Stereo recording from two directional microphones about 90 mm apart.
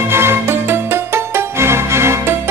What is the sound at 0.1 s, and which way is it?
Music, 25° right (ahead or behind).